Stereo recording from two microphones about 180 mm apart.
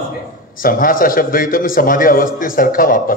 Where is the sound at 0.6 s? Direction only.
50° left (ahead or behind).